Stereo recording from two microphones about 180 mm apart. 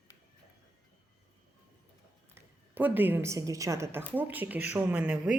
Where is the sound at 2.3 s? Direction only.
10° right (ahead or behind).